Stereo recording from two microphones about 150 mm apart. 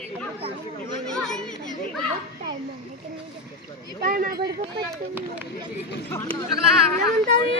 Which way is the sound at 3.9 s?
70° right (ahead or behind).